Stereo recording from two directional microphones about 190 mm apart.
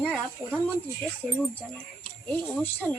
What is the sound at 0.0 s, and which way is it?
Speech, 5° left (ahead or behind).